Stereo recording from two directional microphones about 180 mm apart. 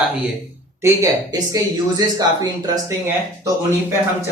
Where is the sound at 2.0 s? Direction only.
20° right (ahead or behind).